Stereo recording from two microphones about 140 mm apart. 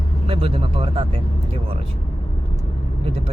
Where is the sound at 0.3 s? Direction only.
40° right (ahead or behind).